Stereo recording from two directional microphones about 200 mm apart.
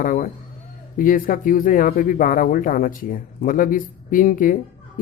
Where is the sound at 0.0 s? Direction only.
40° left (ahead or behind).